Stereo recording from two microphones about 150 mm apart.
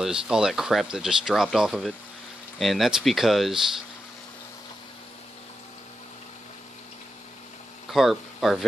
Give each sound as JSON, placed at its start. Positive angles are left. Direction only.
{"t": 0.0, "sound": "speech", "side_deg": -5}
{"t": 7.9, "sound": "speech", "side_deg": 0}